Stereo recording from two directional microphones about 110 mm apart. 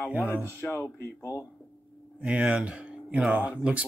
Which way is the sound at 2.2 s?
10° right (ahead or behind).